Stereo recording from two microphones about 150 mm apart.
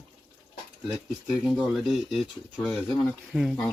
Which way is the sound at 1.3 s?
Centre (ahead or behind).